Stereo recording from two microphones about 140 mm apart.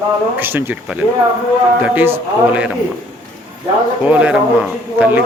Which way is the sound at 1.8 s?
15° right (ahead or behind).